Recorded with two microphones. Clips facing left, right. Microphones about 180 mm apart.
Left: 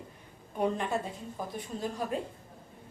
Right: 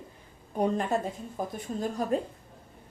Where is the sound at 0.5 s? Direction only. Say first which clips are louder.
Right 3 dB; 40° right (ahead or behind).